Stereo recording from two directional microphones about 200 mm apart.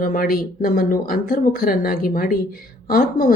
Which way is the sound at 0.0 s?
45° left (ahead or behind).